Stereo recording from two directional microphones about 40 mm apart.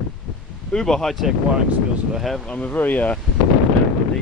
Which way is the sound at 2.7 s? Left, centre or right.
Left.